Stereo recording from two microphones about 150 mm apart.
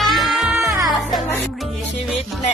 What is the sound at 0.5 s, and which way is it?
Music, 20° right (ahead or behind).